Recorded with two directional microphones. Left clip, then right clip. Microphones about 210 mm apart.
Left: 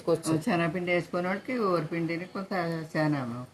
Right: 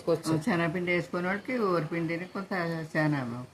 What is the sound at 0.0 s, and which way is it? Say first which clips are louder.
Speech: left 1 dB; 5° left (ahead or behind).